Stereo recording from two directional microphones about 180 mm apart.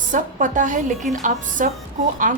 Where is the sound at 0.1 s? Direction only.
45° right (ahead or behind).